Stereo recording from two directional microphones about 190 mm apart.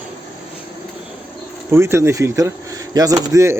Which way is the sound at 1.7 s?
15° right (ahead or behind).